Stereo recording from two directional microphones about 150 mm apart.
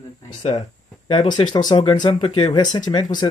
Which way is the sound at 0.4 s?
40° left (ahead or behind).